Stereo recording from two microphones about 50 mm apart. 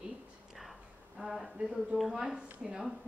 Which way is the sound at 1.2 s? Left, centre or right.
Centre.